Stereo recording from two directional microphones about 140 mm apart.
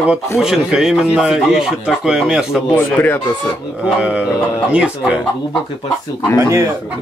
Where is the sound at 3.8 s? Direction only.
10° right (ahead or behind).